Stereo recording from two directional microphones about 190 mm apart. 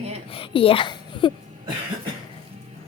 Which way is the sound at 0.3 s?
25° left (ahead or behind).